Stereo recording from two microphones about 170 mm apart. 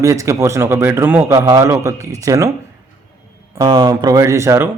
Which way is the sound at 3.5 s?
25° right (ahead or behind).